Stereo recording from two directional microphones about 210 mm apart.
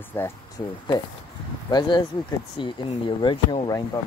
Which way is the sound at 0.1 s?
10° left (ahead or behind).